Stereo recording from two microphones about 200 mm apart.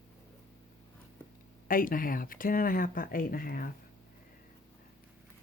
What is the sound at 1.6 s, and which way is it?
Speech, 45° left (ahead or behind).